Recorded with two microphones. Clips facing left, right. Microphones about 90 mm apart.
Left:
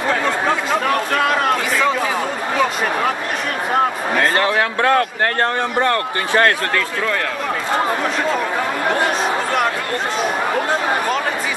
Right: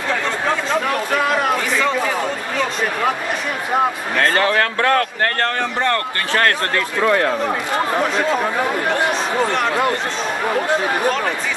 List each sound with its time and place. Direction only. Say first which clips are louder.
4.2 s a man's voice: right 1 dB; 15° left (ahead or behind)
7.0 s speech: right 5 dB; 25° right (ahead or behind)